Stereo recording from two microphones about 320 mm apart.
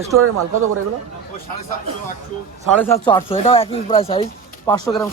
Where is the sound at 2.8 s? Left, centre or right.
Centre.